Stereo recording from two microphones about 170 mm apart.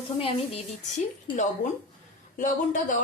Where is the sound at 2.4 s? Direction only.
50° left (ahead or behind).